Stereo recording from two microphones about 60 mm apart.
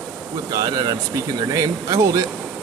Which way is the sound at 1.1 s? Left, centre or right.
Right.